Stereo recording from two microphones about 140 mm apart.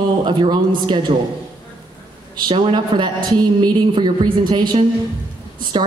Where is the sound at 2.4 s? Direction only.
35° right (ahead or behind).